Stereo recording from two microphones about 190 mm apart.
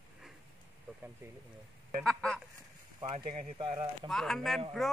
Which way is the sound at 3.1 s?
30° right (ahead or behind).